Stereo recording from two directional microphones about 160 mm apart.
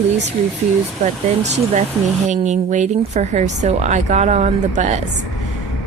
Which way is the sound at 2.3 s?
45° right (ahead or behind).